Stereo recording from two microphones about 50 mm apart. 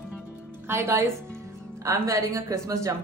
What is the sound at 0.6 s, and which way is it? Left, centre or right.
Speech, right.